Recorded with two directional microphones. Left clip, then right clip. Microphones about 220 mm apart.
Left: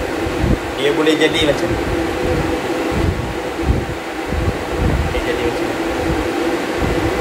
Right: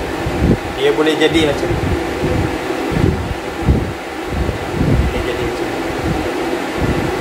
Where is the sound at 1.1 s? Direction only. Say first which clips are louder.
Right 1 dB; 15° right (ahead or behind).